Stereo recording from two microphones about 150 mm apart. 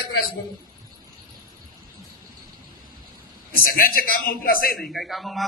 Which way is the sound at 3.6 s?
80° left.